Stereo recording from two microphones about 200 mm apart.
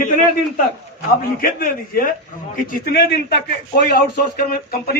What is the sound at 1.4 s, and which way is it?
Speech, 45° left (ahead or behind).